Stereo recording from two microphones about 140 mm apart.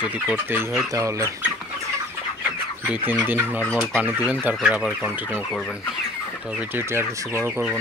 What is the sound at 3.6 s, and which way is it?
Fowl, 5° left (ahead or behind).